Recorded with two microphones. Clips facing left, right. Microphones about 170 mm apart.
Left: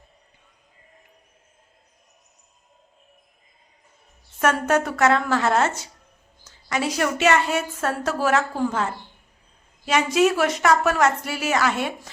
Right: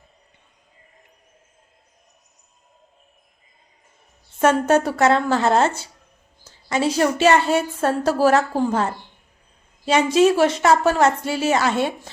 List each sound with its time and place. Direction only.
4.4 s a woman's voice: 30° right (ahead or behind)